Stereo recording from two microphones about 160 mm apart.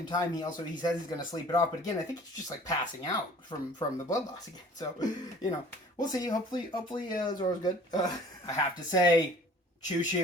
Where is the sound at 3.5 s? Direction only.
30° left (ahead or behind).